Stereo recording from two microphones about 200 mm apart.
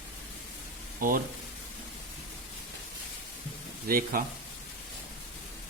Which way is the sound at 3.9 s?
45° right (ahead or behind).